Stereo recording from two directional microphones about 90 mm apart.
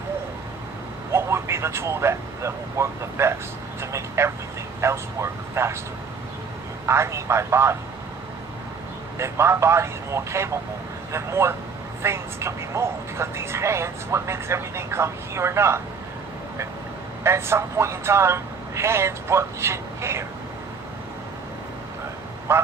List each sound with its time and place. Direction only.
1.1 s speech: 30° right (ahead or behind)
6.8 s speech: 30° right (ahead or behind)
9.1 s speech: 30° right (ahead or behind)
17.2 s speech: 30° right (ahead or behind)
22.5 s speech: 30° right (ahead or behind)